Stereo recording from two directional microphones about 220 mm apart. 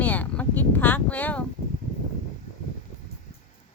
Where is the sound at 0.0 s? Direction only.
5° left (ahead or behind).